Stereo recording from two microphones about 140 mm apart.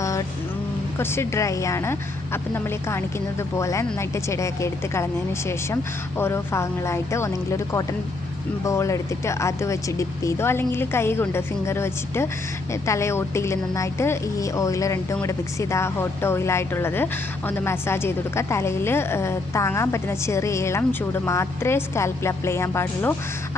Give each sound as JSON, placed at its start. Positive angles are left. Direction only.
{"t": 0.0, "sound": "vehicle", "side_deg": 20}
{"t": 0.9, "sound": "a woman's voice", "side_deg": 20}